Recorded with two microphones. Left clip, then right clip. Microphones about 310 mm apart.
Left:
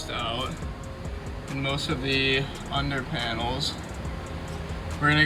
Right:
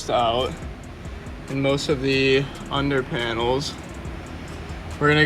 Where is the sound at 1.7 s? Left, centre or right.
Centre.